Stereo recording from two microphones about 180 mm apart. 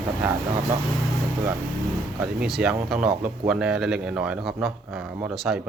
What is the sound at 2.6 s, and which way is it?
Speech, 5° right (ahead or behind).